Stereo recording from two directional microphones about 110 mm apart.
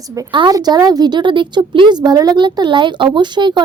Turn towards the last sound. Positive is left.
turn(degrees=-45)  # may be behind; listen again after turning